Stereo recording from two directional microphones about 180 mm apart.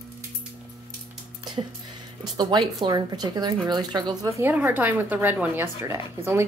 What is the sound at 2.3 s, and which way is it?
A woman's voice, 25° right (ahead or behind).